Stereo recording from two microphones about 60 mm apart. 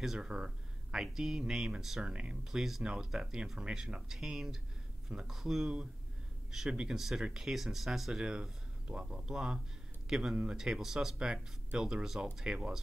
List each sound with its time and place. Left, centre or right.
0.0 s speech: centre